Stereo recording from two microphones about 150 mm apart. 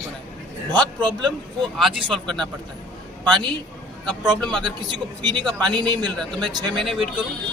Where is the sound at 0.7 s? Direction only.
30° right (ahead or behind).